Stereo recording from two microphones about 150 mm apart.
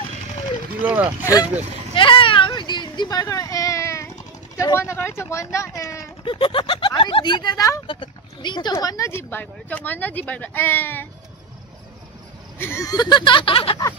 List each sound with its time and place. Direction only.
1.2 s speech: 25° left (ahead or behind)
2.0 s a sound: 35° left (ahead or behind); by 4.1 s 20° left (ahead or behind)
4.6 s speech: 20° left (ahead or behind)
6.2 s speech: 35° left (ahead or behind); by 11.1 s 15° left (ahead or behind)
12.5 s speech: 15° left (ahead or behind); by 13.7 s 35° left (ahead or behind)